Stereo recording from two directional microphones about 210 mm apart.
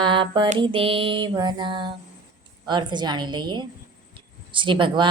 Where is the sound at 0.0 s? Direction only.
20° right (ahead or behind).